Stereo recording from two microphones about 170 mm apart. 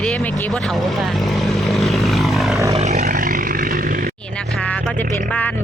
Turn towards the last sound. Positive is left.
turn(degrees=10)  # may be behind; listen again after turning